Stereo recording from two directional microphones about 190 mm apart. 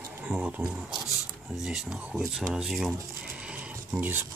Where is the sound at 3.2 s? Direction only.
5° right (ahead or behind).